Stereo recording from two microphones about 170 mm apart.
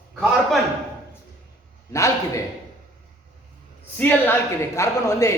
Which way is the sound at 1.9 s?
15° left (ahead or behind).